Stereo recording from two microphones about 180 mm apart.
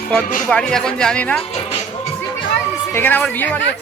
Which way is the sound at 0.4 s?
5° left (ahead or behind).